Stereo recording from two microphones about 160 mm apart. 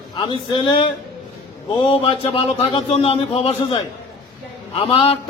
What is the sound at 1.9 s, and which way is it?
A man's voice, 35° left (ahead or behind).